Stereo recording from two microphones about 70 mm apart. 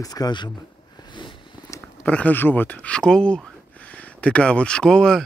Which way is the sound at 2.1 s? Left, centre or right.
Left.